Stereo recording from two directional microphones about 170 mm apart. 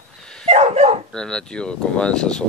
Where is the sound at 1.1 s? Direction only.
5° left (ahead or behind).